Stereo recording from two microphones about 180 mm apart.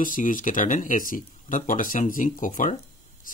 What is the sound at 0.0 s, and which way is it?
Speech, 50° left (ahead or behind).